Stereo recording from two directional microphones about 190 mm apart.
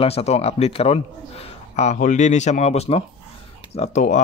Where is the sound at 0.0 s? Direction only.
30° left (ahead or behind).